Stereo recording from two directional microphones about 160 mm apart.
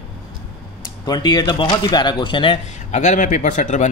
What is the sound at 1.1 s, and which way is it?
A man's voice, 25° left (ahead or behind).